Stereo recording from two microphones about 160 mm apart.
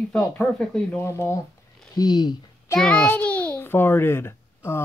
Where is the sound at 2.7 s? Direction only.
5° left (ahead or behind).